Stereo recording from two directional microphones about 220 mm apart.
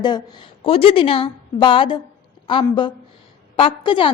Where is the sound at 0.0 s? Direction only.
20° left (ahead or behind).